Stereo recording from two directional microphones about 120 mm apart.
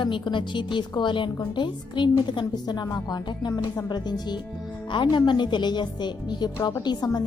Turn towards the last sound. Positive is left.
turn(degrees=35)  # may be behind; listen again after turning